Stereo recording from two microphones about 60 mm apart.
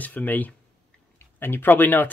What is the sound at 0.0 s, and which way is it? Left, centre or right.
Speech, left.